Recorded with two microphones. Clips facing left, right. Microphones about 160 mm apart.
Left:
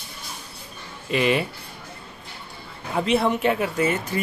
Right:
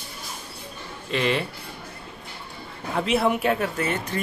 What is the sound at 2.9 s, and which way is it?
Speech, centre (ahead or behind).